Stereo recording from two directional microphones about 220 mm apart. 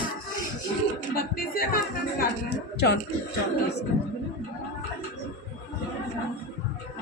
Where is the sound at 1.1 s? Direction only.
40° left (ahead or behind).